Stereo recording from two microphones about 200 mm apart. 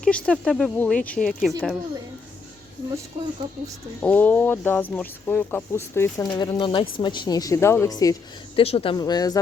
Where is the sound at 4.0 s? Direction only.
5° left (ahead or behind).